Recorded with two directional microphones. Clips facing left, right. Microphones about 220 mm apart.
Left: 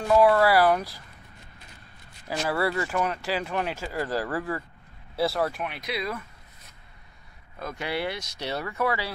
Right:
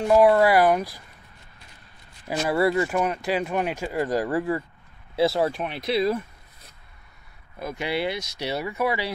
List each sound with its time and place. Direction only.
0.1 s speech: 20° right (ahead or behind)
2.2 s speech: 15° right (ahead or behind)
7.5 s speech: 10° right (ahead or behind)